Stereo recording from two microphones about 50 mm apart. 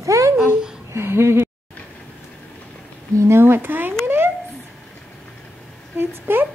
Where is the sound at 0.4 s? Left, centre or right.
Centre.